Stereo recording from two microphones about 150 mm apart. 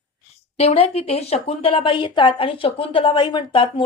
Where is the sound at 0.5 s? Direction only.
45° left (ahead or behind).